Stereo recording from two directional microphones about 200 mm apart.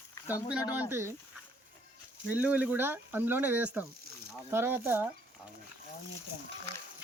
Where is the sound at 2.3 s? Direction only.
5° right (ahead or behind).